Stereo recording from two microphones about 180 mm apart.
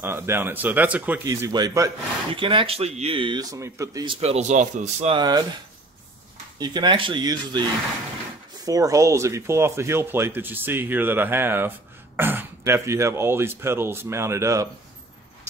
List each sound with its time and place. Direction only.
0.0 s speech: 10° right (ahead or behind)
1.2 s speech: 20° right (ahead or behind); by 5.1 s 40° right (ahead or behind)
5.1 s speech: 25° right (ahead or behind)
6.6 s speech: 25° right (ahead or behind)
8.6 s speech: 20° right (ahead or behind)